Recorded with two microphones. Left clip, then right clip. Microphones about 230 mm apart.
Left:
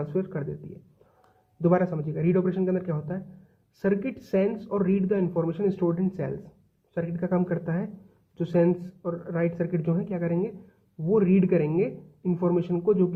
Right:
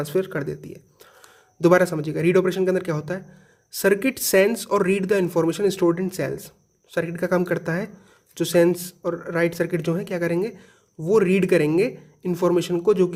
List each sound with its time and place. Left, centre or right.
0.0 s speech: right
1.6 s speech: right